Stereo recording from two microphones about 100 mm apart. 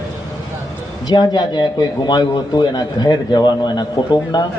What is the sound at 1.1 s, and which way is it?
A man's voice, 45° left (ahead or behind).